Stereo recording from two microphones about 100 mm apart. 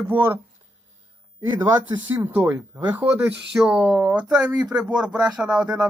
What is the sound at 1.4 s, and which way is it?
Speech, 25° right (ahead or behind).